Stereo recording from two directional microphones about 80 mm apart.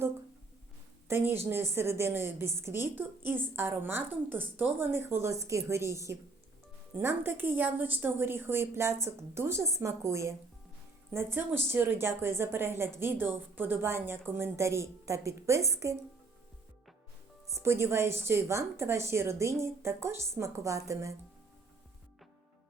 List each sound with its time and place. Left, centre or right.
1.0 s a woman's voice: right
17.5 s a woman's voice: right